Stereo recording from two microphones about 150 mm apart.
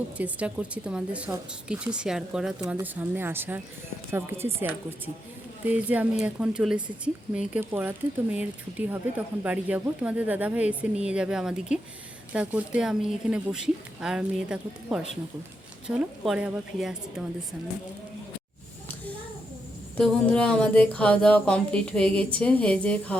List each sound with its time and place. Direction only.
0.2 s speech: 10° right (ahead or behind)
5.6 s speech: 10° right (ahead or behind)
20.0 s speech: 5° left (ahead or behind)